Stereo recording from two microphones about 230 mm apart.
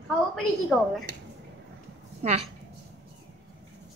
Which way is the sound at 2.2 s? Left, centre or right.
Right.